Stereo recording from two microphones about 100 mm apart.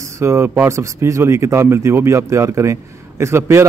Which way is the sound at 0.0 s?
25° right (ahead or behind).